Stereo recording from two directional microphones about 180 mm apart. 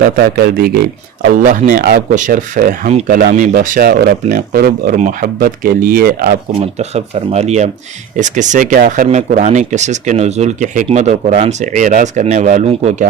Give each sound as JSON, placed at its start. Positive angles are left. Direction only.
{"t": 0.0, "sound": "a man's voice", "side_deg": -60}
{"t": 1.4, "sound": "speech", "side_deg": -50}
{"t": 6.7, "sound": "speech", "side_deg": -35}